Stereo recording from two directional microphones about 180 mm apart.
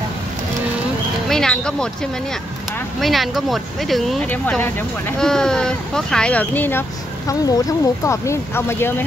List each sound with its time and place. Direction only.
1.3 s speech: 5° left (ahead or behind)
3.0 s speech: centre (ahead or behind)
7.2 s speech: 20° left (ahead or behind)